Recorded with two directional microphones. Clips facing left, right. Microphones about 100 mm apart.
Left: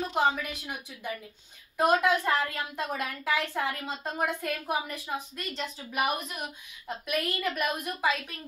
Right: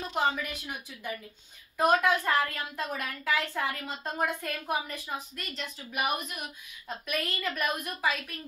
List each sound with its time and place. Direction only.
0.1 s a woman's voice: 10° left (ahead or behind)
5.3 s a woman's voice: 30° left (ahead or behind)
6.9 s a woman's voice: 15° left (ahead or behind)